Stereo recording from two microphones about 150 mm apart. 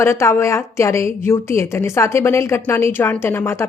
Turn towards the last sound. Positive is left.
turn(degrees=15)  # may be behind; listen again after turning